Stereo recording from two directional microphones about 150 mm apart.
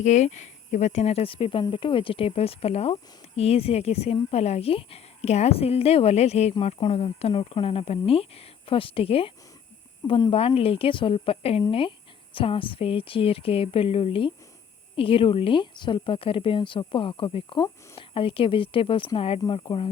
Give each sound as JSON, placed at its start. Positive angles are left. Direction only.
{"t": 0.0, "sound": "speech", "side_deg": 50}